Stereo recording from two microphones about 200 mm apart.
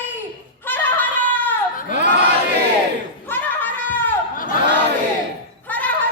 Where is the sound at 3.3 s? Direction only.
10° left (ahead or behind).